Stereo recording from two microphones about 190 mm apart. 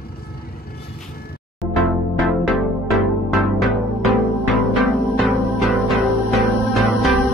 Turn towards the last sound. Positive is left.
turn(degrees=0)  # may be behind; listen again after turning